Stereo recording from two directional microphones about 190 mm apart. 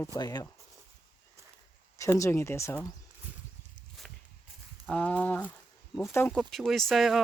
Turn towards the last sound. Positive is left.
turn(degrees=0)  # may be behind; listen again after turning